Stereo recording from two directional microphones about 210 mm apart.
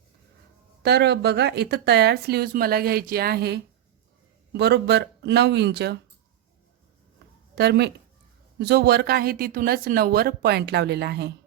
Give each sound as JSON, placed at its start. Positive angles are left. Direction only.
{"t": 0.8, "sound": "speech", "side_deg": -50}
{"t": 7.5, "sound": "speech", "side_deg": -50}